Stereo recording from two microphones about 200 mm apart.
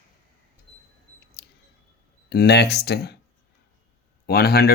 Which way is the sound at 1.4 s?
55° left (ahead or behind).